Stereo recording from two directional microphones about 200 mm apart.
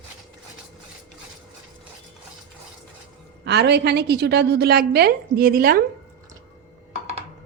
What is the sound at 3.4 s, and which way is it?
A woman's voice, 55° right (ahead or behind).